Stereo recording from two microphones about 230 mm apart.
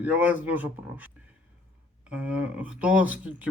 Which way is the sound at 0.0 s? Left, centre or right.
Centre.